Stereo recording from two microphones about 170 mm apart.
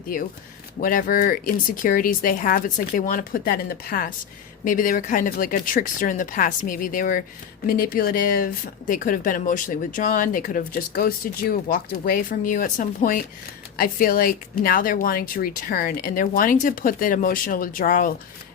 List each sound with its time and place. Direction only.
0.8 s speech: 55° left (ahead or behind)